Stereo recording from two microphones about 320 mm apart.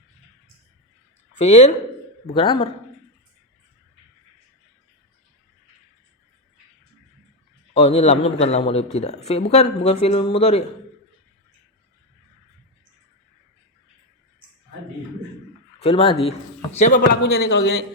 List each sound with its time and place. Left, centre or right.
1.4 s speech: left
7.7 s speech: centre
15.8 s speech: centre